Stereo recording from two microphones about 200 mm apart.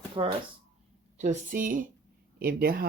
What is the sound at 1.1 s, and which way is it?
Speech, 40° right (ahead or behind).